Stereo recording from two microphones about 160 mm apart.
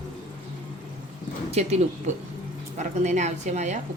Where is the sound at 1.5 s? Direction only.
40° right (ahead or behind).